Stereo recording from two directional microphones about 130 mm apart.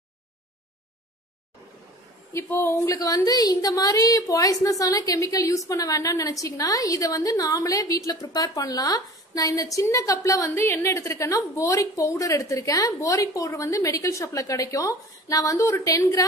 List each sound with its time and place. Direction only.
2.3 s a woman's voice: 20° left (ahead or behind)